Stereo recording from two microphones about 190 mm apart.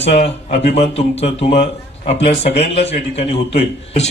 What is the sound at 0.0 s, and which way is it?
Speech, 35° left (ahead or behind).